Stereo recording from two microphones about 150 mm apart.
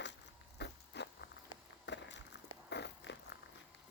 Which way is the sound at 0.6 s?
90° left.